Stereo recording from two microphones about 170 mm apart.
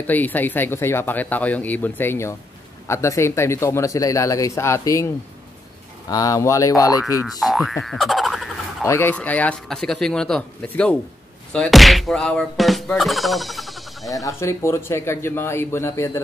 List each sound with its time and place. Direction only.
0.0 s speech: 10° left (ahead or behind)
7.2 s boing: centre (ahead or behind)
8.8 s speech: 15° left (ahead or behind)
11.5 s music: 5° left (ahead or behind)
14.1 s speech: 20° left (ahead or behind)